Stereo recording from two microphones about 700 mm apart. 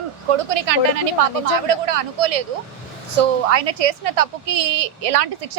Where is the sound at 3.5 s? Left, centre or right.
Right.